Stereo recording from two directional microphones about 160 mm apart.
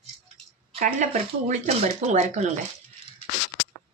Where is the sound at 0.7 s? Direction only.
50° right (ahead or behind).